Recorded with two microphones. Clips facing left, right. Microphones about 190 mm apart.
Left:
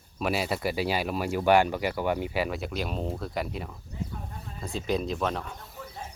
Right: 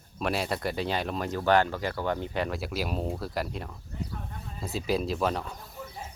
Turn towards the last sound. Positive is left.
turn(degrees=0)  # may be behind; listen again after turning